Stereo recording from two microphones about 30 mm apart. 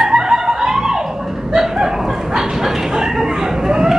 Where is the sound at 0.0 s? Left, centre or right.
Centre.